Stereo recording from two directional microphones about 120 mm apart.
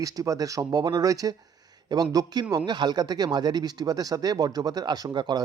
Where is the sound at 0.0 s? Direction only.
30° right (ahead or behind).